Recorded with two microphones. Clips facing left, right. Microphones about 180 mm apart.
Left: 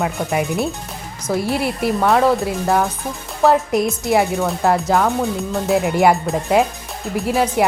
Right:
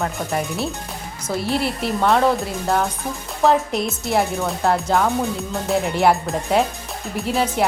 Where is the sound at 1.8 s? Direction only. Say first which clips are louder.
Left 3 dB; 5° left (ahead or behind).